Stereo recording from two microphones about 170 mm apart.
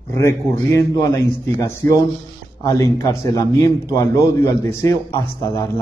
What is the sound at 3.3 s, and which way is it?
A man's voice, 20° left (ahead or behind).